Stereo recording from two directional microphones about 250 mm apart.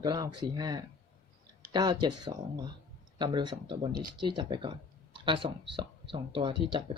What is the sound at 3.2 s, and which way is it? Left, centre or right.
Speech, centre.